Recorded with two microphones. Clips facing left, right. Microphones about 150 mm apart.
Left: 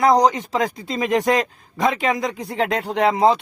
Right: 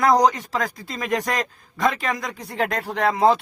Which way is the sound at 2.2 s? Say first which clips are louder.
Left 7 dB; 20° left (ahead or behind).